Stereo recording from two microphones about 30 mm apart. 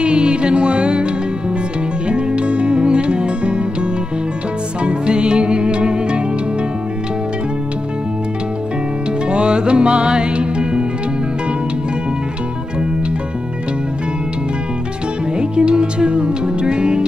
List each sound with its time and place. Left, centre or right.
0.0 s music: right
2.0 s music: right
4.8 s music: right
9.3 s music: right
15.3 s music: right